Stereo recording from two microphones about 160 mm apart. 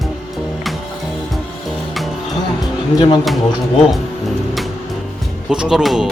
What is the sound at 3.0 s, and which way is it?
Speech, 25° left (ahead or behind).